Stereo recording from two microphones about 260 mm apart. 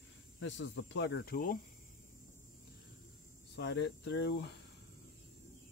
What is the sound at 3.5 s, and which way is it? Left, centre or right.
Speech, left.